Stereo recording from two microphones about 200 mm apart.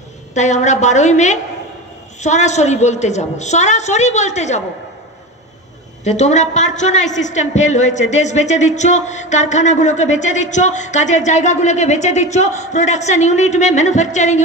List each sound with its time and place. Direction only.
0.3 s a woman's voice: 35° left (ahead or behind)
6.0 s a woman's voice: 35° left (ahead or behind)